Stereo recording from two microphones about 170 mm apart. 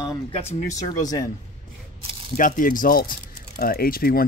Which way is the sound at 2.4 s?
50° left (ahead or behind).